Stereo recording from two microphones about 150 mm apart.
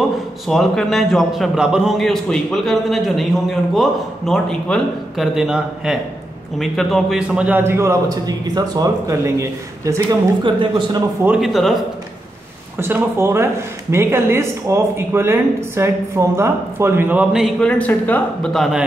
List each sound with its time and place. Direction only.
0.5 s a man's voice: centre (ahead or behind); by 11.1 s 25° right (ahead or behind)
11.2 s a man's voice: 5° right (ahead or behind)
12.7 s speech: 15° right (ahead or behind); by 18.8 s centre (ahead or behind)